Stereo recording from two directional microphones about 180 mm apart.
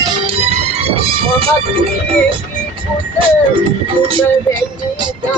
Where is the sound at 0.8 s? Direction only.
30° right (ahead or behind).